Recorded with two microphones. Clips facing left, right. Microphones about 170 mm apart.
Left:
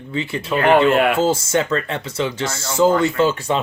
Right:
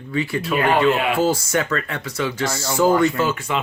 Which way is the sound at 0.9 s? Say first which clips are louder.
Left 4 dB; 55° left (ahead or behind).